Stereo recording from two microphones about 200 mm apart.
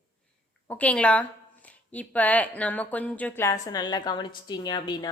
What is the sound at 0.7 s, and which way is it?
A woman's voice, 5° left (ahead or behind).